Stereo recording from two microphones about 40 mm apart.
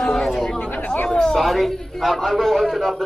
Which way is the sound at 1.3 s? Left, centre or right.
Centre.